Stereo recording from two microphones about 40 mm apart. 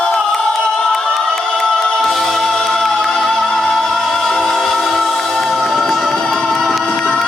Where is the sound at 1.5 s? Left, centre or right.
Centre.